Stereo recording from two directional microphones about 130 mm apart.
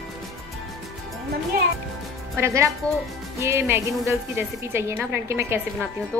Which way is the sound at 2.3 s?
20° right (ahead or behind).